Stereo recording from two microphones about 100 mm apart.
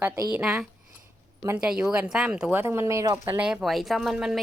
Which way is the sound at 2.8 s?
35° right (ahead or behind).